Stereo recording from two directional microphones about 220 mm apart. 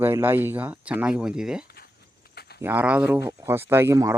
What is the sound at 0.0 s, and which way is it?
Speech, 10° right (ahead or behind).